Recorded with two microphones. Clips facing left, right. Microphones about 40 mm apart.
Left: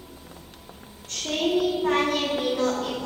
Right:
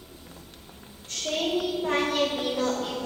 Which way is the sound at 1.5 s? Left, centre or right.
Centre.